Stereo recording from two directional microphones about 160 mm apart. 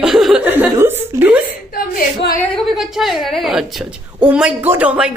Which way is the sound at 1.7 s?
65° left (ahead or behind).